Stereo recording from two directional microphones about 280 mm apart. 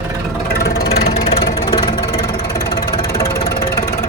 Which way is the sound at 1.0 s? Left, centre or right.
Left.